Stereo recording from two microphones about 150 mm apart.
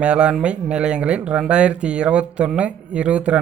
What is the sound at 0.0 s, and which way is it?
Speech, 5° right (ahead or behind).